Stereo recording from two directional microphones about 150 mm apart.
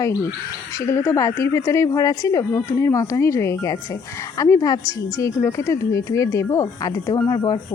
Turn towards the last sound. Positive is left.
turn(degrees=25)  # may be behind; listen again after turning